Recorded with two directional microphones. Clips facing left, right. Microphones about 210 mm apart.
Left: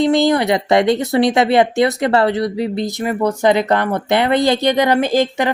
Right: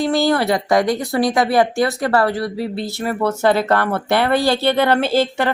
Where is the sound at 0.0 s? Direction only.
20° left (ahead or behind).